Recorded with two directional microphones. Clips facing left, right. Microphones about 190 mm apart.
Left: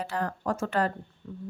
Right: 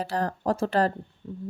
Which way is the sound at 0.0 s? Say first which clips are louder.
Right 3 dB; 35° right (ahead or behind).